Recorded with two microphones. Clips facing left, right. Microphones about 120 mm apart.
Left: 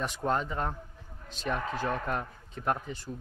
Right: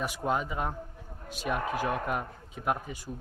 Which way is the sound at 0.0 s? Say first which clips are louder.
Even; 10° right (ahead or behind).